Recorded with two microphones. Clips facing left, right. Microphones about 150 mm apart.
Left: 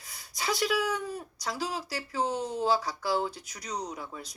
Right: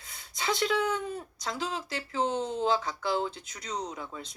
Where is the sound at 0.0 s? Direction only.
25° right (ahead or behind).